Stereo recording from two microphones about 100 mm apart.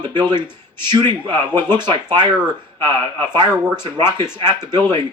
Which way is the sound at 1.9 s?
50° right (ahead or behind).